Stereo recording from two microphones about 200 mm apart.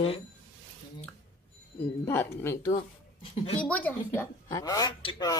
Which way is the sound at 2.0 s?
10° left (ahead or behind).